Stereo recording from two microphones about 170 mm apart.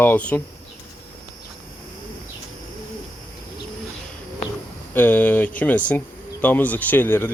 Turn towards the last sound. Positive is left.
turn(degrees=10)  # may be behind; listen again after turning